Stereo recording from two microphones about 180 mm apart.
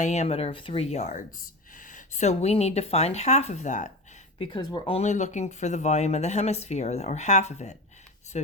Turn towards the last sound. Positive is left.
turn(degrees=40)  # may be behind; listen again after turning